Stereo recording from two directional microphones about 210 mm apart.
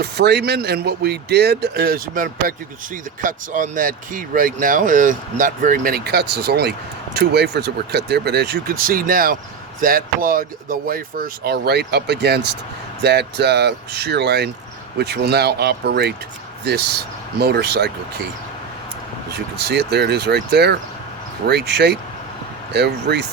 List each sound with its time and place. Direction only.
0.0 s speech: 50° right (ahead or behind)
17.3 s speech: 50° right (ahead or behind)
19.5 s speech: 50° right (ahead or behind)